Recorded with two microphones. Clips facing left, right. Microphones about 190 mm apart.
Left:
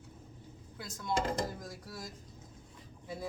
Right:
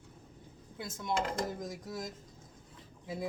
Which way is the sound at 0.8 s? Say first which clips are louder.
Even; 20° right (ahead or behind).